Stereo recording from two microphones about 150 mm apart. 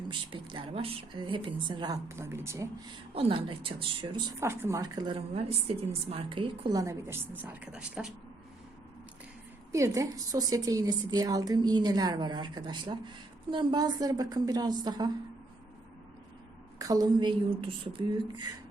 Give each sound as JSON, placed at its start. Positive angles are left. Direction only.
{"t": 0.1, "sound": "a woman's voice", "side_deg": -35}
{"t": 2.0, "sound": "speech", "side_deg": -15}
{"t": 3.2, "sound": "a woman's voice", "side_deg": -40}
{"t": 4.4, "sound": "a woman's voice", "side_deg": -15}
{"t": 9.7, "sound": "a woman's voice", "side_deg": -20}
{"t": 16.7, "sound": "a woman's voice", "side_deg": -25}